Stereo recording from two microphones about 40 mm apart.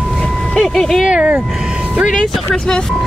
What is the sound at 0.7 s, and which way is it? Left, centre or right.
Speech, centre.